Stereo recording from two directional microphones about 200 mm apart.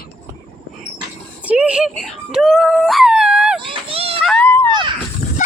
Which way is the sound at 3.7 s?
30° right (ahead or behind).